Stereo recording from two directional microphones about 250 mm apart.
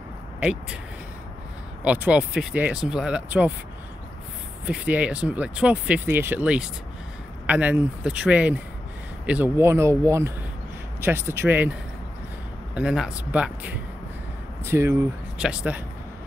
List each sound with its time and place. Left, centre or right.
0.4 s speech: centre
1.9 s speech: centre
4.6 s speech: centre
12.7 s speech: centre